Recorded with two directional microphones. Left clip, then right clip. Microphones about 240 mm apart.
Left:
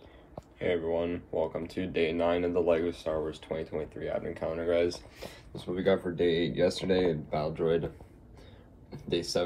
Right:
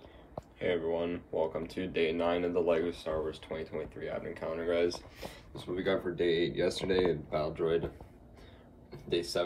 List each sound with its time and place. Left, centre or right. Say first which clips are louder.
0.6 s speech: left 2 dB; centre
9.1 s speech: left 2 dB; centre